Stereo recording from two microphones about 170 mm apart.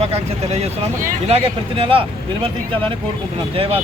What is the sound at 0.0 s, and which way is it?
Speech, 40° right (ahead or behind).